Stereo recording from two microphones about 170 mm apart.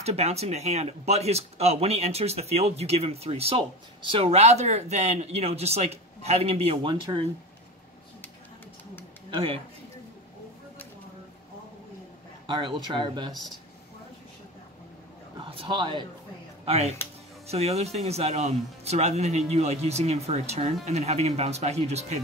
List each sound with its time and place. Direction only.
0.0 s speech: 40° right (ahead or behind)
9.3 s speech: 35° right (ahead or behind)
12.4 s speech: 30° right (ahead or behind)
15.5 s speech: 30° right (ahead or behind)
16.6 s speech: 40° right (ahead or behind)